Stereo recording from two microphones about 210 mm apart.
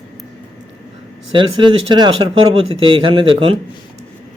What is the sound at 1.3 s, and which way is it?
Speech, 20° right (ahead or behind).